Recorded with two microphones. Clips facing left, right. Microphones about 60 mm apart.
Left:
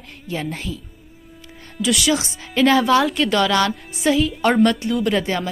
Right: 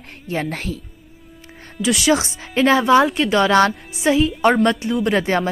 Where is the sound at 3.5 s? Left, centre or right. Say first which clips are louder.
Right 4 dB; right.